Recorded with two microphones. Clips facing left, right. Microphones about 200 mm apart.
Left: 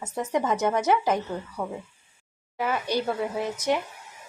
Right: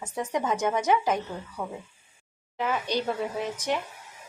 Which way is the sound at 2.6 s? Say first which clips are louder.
Left 1 dB; 10° left (ahead or behind).